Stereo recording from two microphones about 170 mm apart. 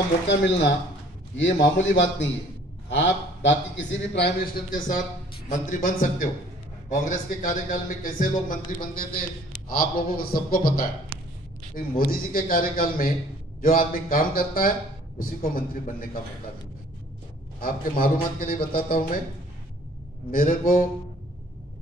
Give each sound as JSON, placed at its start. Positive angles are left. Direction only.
{"t": 0.3, "sound": "a man's voice", "side_deg": 90}
{"t": 4.6, "sound": "a man's voice", "side_deg": 50}
{"t": 12.0, "sound": "a man's voice", "side_deg": 60}
{"t": 17.6, "sound": "a man's voice", "side_deg": 55}
{"t": 20.2, "sound": "a man's voice", "side_deg": 55}